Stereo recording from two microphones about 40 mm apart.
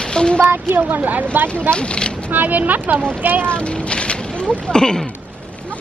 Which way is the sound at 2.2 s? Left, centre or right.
Right.